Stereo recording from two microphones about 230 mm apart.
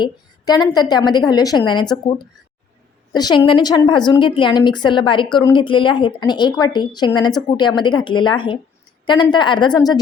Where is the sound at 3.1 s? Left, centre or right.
Centre.